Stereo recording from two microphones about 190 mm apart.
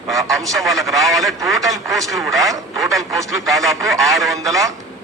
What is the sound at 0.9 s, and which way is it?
Speech, centre (ahead or behind).